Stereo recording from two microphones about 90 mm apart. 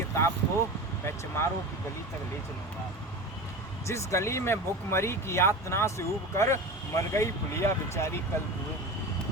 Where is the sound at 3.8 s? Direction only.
35° left (ahead or behind).